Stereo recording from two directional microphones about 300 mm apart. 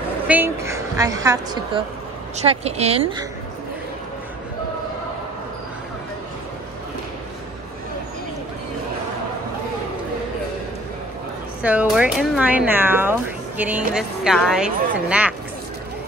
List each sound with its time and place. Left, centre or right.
0.3 s a woman's voice: centre
11.6 s speech: centre